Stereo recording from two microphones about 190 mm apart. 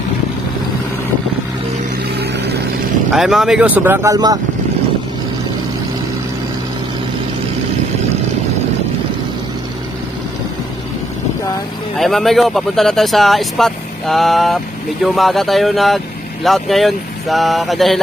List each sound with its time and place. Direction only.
2.1 s vehicle: 60° right (ahead or behind)
3.1 s speech: centre (ahead or behind); by 4.4 s 20° right (ahead or behind)
12.0 s speech: centre (ahead or behind)